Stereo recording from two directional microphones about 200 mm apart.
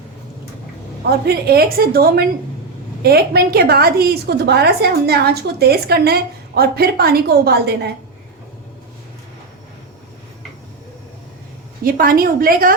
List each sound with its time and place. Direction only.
1.2 s a woman's voice: 50° right (ahead or behind)
11.9 s a woman's voice: 45° right (ahead or behind)